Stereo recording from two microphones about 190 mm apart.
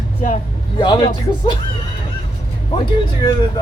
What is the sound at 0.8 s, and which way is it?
Speech, 25° left (ahead or behind).